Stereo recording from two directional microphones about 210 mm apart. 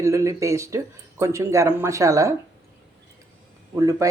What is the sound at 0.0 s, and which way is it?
Speech, 15° right (ahead or behind).